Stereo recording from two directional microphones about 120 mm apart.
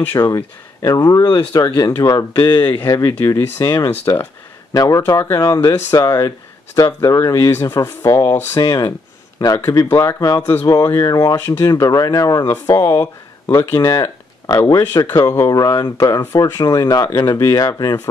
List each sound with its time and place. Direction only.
0.0 s speech: 15° left (ahead or behind)
0.8 s speech: 30° left (ahead or behind)
2.3 s speech: 40° left (ahead or behind)
2.9 s speech: 25° left (ahead or behind)
10.4 s speech: 15° left (ahead or behind)
11.0 s speech: 30° left (ahead or behind)
11.3 s speech: 20° left (ahead or behind)
11.6 s speech: 30° left (ahead or behind)